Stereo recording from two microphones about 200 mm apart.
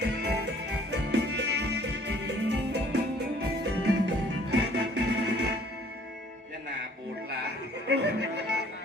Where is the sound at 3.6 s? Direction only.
55° right (ahead or behind).